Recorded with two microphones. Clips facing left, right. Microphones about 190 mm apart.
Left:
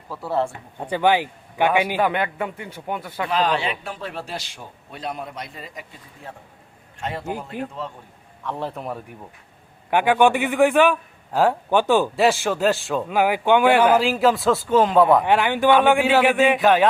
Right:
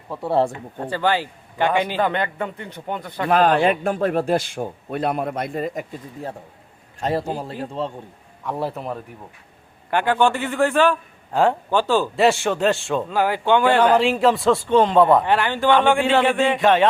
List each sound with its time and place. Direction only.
0.1 s speech: 25° right (ahead or behind)
0.9 s a man's voice: 15° left (ahead or behind)
3.2 s a man's voice: 50° right (ahead or behind)
7.0 s a man's voice: 35° right (ahead or behind)
8.4 s a man's voice: 10° right (ahead or behind)
9.9 s a man's voice: 15° left (ahead or behind)
11.3 s speech: 5° left (ahead or behind)
11.7 s a man's voice: 15° left (ahead or behind)
12.1 s a man's voice: centre (ahead or behind)
13.1 s a man's voice: 15° left (ahead or behind)
15.2 s a man's voice: 15° left (ahead or behind)